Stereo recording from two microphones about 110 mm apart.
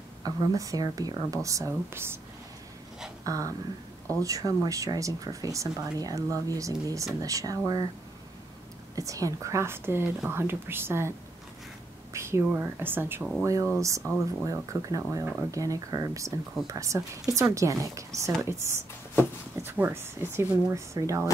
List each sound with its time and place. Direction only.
0.2 s speech: 30° right (ahead or behind)
3.3 s speech: 30° right (ahead or behind)
8.9 s speech: 30° right (ahead or behind)